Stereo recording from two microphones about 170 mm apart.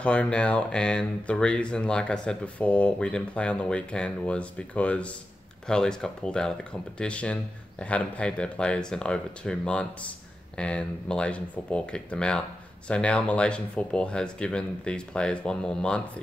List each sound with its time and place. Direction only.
0.0 s speech: 5° left (ahead or behind)